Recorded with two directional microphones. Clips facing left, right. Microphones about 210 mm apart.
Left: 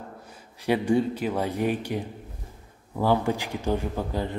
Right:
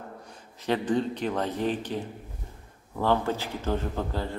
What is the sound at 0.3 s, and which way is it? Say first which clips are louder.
A man's voice: left 3 dB; 10° left (ahead or behind).